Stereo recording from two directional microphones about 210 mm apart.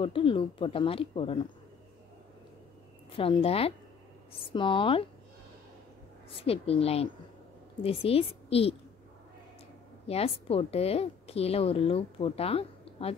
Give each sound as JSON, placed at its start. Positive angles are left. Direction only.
{"t": 0.0, "sound": "a woman's voice", "side_deg": 25}
{"t": 3.1, "sound": "a woman's voice", "side_deg": 25}
{"t": 6.4, "sound": "a woman's voice", "side_deg": 30}
{"t": 10.0, "sound": "a woman's voice", "side_deg": 30}